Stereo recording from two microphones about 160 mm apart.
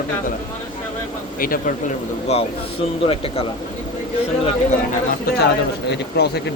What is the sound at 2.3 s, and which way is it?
Speech, 40° left (ahead or behind).